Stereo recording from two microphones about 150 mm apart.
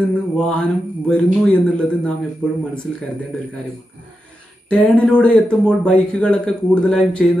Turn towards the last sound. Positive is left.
turn(degrees=5)  # may be behind; listen again after turning